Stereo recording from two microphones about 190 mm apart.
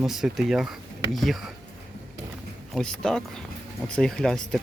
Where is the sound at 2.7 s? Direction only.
5° left (ahead or behind).